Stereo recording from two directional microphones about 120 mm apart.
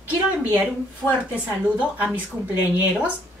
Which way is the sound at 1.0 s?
5° left (ahead or behind).